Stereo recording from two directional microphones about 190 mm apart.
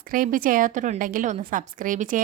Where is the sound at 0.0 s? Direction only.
45° right (ahead or behind).